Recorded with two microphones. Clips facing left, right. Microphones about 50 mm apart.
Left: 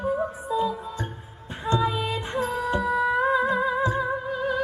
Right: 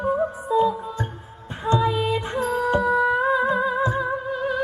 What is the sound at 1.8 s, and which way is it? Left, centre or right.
Music, right.